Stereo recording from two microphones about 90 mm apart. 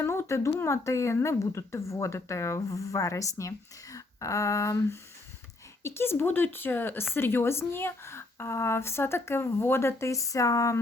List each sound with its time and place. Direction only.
0.0 s speech: 30° left (ahead or behind)
3.9 s a sound: 35° left (ahead or behind)
5.8 s speech: 30° left (ahead or behind)